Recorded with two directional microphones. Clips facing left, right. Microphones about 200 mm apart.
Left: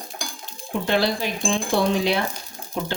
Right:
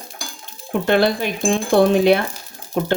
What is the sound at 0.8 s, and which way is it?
Speech, 55° right (ahead or behind).